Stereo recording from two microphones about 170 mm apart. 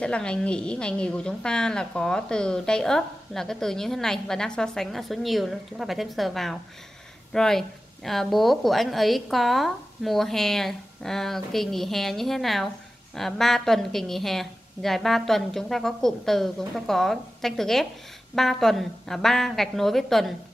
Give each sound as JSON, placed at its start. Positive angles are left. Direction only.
{"t": 0.0, "sound": "a woman's voice", "side_deg": 5}